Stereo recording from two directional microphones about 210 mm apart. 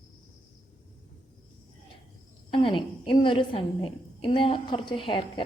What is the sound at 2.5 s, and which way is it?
A woman's voice, 25° left (ahead or behind).